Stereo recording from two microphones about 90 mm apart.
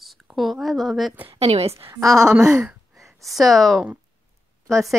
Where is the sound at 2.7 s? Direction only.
Centre (ahead or behind).